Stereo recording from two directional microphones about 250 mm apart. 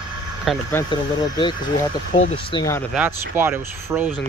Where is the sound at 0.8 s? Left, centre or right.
Centre.